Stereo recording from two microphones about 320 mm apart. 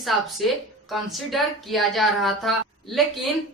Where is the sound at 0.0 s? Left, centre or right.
Centre.